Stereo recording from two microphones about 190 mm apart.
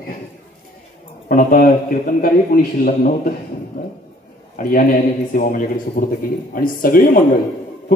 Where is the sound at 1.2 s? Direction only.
45° left (ahead or behind).